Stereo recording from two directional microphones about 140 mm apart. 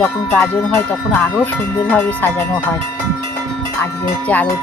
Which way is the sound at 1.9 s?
10° left (ahead or behind).